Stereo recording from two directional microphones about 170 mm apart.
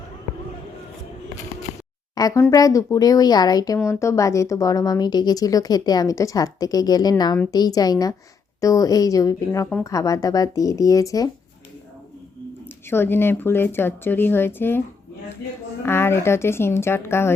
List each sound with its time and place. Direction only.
2.1 s speech: 20° left (ahead or behind)
12.6 s speech: 15° left (ahead or behind)
15.9 s speech: 15° left (ahead or behind)